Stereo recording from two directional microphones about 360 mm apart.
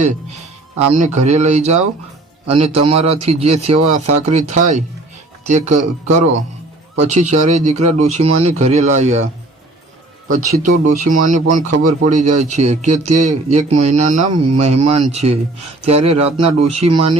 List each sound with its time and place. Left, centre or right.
0.9 s a man's voice: centre
6.9 s speech: centre
10.2 s a man's voice: right